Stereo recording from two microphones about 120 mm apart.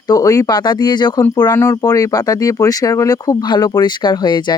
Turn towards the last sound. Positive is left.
turn(degrees=40)  # may be behind; listen again after turning